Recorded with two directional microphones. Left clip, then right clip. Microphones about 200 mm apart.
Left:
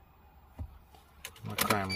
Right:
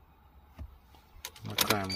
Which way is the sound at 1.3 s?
55° right (ahead or behind).